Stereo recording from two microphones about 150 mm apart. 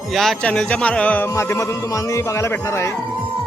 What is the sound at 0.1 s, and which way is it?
A man's voice, centre (ahead or behind).